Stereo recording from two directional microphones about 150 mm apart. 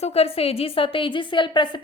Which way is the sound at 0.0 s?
40° left (ahead or behind).